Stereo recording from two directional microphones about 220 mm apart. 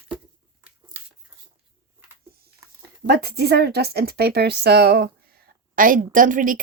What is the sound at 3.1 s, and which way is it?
A woman's voice, 45° right (ahead or behind).